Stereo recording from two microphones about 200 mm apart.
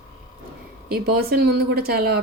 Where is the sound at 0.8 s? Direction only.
50° right (ahead or behind).